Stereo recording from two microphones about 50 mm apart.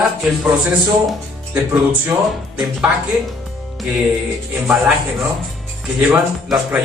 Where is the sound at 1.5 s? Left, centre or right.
Right.